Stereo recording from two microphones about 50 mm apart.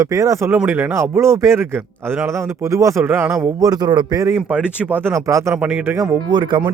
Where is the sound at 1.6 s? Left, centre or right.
Right.